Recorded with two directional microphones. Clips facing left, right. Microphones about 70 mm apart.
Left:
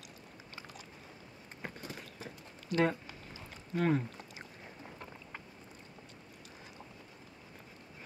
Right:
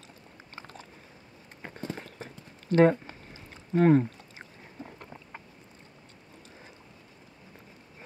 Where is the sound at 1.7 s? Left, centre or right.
Right.